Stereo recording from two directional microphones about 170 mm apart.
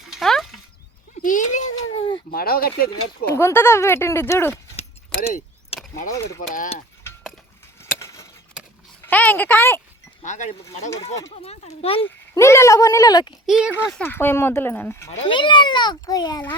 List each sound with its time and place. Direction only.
0.1 s a sound: centre (ahead or behind)
1.2 s a sound: 50° left (ahead or behind)
2.3 s speech: 60° left (ahead or behind)
2.9 s speech: 15° left (ahead or behind)
5.7 s vehicle: 35° left (ahead or behind)
6.1 s a child's voice: 20° left (ahead or behind)
7.9 s a sound: 15° left (ahead or behind)
9.0 s speech: 10° left (ahead or behind)
10.2 s speech: 45° left (ahead or behind)
12.0 s a child's voice: 15° left (ahead or behind)
13.5 s speech: 5° right (ahead or behind)
14.0 s speech: 10° left (ahead or behind)
15.2 s a child's voice: 30° left (ahead or behind)